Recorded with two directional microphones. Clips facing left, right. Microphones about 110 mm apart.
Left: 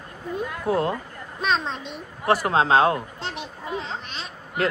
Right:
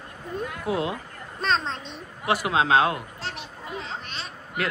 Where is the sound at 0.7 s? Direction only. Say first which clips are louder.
Left 4 dB; 45° left (ahead or behind).